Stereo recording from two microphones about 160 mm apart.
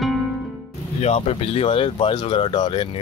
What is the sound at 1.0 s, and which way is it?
Speech, 40° left (ahead or behind).